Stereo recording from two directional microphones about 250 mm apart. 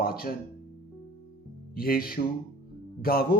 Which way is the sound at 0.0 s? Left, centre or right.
Left.